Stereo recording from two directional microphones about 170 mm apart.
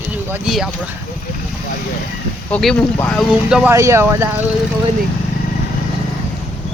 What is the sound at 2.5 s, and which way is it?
Speech, 5° left (ahead or behind).